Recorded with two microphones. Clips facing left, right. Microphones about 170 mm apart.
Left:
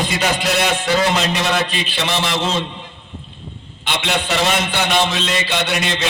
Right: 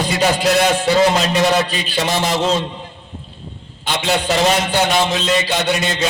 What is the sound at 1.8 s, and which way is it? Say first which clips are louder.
Speech: right 3 dB; 40° right (ahead or behind).